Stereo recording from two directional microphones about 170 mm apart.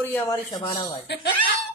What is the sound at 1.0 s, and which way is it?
Speech, 80° left.